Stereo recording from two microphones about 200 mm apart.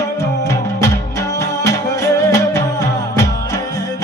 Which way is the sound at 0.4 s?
15° left (ahead or behind).